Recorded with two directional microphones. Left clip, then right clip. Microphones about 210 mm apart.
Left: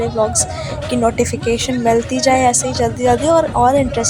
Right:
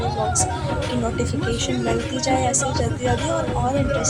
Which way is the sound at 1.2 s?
35° left (ahead or behind).